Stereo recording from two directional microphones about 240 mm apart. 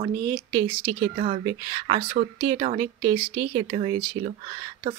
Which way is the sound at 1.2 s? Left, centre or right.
Right.